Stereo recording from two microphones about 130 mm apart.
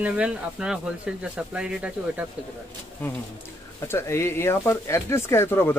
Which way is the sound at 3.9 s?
20° left (ahead or behind).